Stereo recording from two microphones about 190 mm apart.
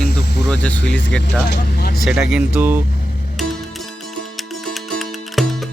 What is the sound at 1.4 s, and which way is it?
Speech, 60° left (ahead or behind).